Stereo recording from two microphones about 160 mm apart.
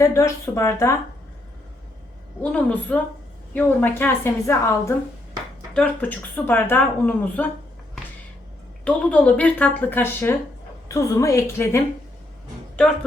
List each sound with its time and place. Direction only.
0.0 s speech: 20° left (ahead or behind)
2.4 s speech: 10° left (ahead or behind)
8.8 s speech: 10° left (ahead or behind)
12.7 s speech: 5° left (ahead or behind)